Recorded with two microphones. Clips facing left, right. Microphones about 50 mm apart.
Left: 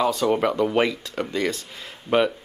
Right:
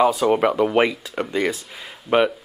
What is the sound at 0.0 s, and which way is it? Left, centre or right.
Speech, centre.